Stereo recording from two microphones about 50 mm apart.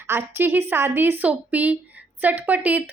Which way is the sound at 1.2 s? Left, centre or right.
Right.